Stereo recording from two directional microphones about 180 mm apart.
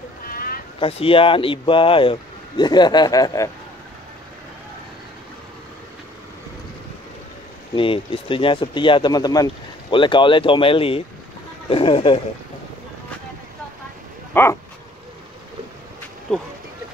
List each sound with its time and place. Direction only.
0.3 s a sound: 55° left (ahead or behind)
0.7 s speech: 30° left (ahead or behind)
7.7 s speech: 30° left (ahead or behind)
14.3 s dog: 15° left (ahead or behind)
16.3 s speech: centre (ahead or behind)